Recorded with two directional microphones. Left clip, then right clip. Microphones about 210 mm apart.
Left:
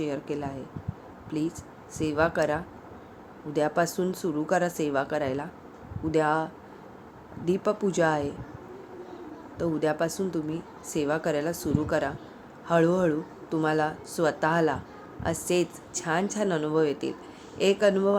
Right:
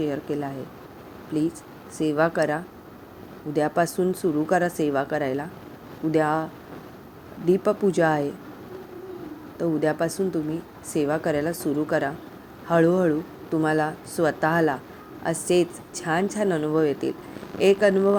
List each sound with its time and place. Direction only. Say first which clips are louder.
0.0 s speech: right 4 dB; 15° right (ahead or behind)
9.6 s speech: right 3 dB; 15° right (ahead or behind)